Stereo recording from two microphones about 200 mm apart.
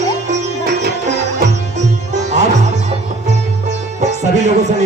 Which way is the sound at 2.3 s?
35° right (ahead or behind).